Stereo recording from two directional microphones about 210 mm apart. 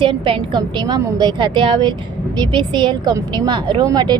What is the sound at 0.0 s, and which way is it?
A woman's voice, 25° right (ahead or behind).